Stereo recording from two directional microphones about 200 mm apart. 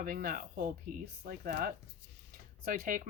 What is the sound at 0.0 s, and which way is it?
Speech, 45° right (ahead or behind).